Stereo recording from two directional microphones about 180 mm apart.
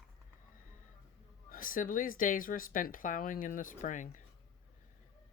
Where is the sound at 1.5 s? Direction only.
50° left (ahead or behind).